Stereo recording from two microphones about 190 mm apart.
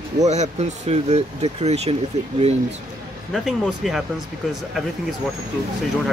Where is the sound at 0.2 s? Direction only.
35° right (ahead or behind).